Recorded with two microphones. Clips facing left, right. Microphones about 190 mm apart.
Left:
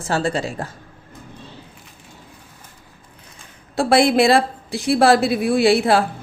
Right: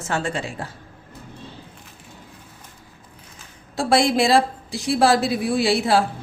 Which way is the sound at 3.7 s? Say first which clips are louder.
Left 3 dB; 60° left (ahead or behind).